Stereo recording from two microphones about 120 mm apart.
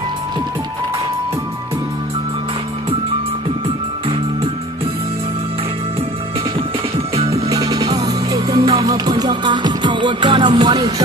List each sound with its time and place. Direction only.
7.2 s music: 55° right (ahead or behind)
7.4 s music: 30° right (ahead or behind)
8.4 s music: 50° right (ahead or behind)
8.8 s music: 30° right (ahead or behind)